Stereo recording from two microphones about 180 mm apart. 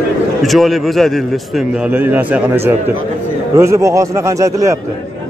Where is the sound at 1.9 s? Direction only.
10° right (ahead or behind).